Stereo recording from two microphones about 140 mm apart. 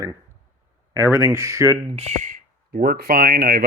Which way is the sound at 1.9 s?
50° right (ahead or behind).